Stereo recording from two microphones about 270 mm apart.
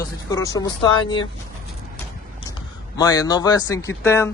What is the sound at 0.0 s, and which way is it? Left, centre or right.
Speech, centre.